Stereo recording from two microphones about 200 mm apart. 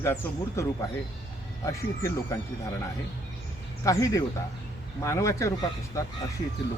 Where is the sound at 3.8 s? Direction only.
15° left (ahead or behind).